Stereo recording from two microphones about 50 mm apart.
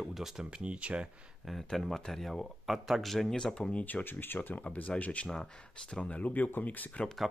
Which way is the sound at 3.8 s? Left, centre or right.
Left.